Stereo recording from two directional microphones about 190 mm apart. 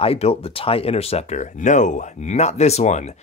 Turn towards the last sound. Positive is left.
turn(degrees=40)  # may be behind; listen again after turning